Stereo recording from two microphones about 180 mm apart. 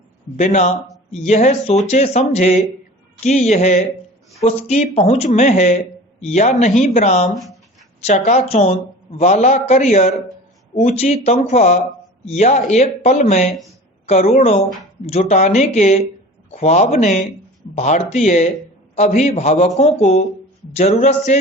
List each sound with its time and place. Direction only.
0.3 s a man's voice: 40° left (ahead or behind)
7.3 s speech: centre (ahead or behind)
8.0 s a man's voice: 40° left (ahead or behind)
13.5 s speech: centre (ahead or behind)
14.1 s a man's voice: 35° left (ahead or behind)
21.3 s music: 40° left (ahead or behind)